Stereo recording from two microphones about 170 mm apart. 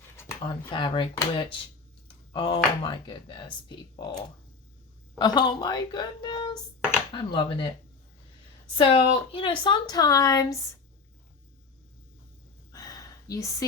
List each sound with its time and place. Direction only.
0.4 s speech: 30° left (ahead or behind)
5.1 s speech: 25° left (ahead or behind)
8.8 s speech: 35° left (ahead or behind)
12.7 s a sound: 20° left (ahead or behind)